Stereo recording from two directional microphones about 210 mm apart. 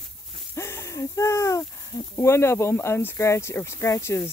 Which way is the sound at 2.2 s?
10° left (ahead or behind).